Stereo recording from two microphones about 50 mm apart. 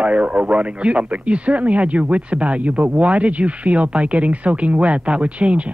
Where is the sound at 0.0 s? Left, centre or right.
Right.